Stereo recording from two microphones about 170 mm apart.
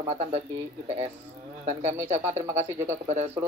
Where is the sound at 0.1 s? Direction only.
40° right (ahead or behind).